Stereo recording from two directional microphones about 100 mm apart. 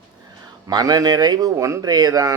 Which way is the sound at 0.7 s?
40° right (ahead or behind).